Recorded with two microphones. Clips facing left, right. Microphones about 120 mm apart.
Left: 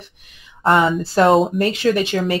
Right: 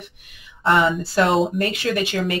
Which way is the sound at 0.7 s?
40° left (ahead or behind).